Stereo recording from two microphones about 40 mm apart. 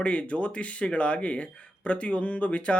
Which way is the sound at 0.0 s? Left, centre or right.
Left.